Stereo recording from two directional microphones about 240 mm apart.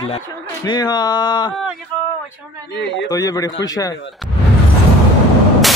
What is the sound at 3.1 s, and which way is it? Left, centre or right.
Speech, centre.